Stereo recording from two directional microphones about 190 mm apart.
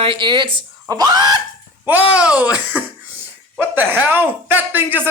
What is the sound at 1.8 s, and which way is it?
Speech, 10° right (ahead or behind).